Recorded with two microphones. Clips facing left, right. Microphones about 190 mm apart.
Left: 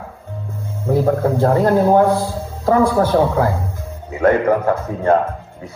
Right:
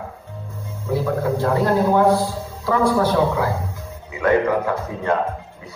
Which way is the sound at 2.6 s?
50° left (ahead or behind).